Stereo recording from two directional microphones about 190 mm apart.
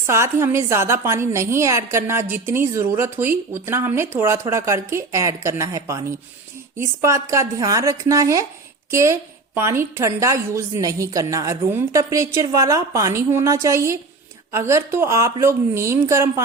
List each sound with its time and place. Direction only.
0.0 s a woman's voice: 15° right (ahead or behind)